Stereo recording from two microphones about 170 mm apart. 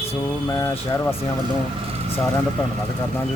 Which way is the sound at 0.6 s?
20° left (ahead or behind).